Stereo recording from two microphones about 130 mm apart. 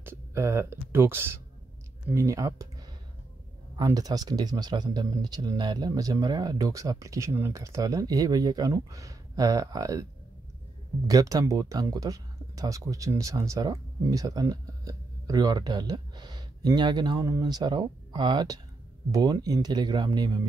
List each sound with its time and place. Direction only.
0.0 s speech: 20° right (ahead or behind)
3.7 s speech: 30° right (ahead or behind)
11.1 s speech: 25° right (ahead or behind)